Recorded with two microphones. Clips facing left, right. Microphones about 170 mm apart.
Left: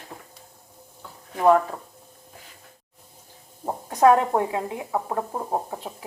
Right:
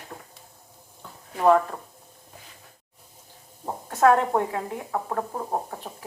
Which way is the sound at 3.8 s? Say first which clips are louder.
Left 2 dB; 15° left (ahead or behind).